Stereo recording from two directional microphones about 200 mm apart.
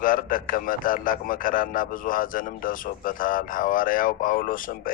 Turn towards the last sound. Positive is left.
turn(degrees=45)  # may be behind; listen again after turning